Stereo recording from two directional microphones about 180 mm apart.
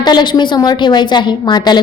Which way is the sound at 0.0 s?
25° left (ahead or behind).